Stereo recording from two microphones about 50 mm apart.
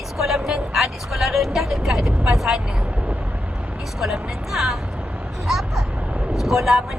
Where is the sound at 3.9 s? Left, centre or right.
Centre.